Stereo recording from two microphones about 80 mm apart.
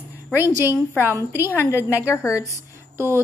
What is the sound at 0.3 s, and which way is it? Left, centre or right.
A woman's voice, right.